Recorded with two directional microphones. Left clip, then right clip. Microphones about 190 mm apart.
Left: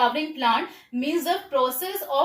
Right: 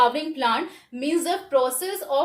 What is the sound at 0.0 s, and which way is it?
A woman's voice, 30° right (ahead or behind).